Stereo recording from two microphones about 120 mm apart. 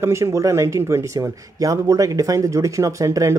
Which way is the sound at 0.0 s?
25° right (ahead or behind).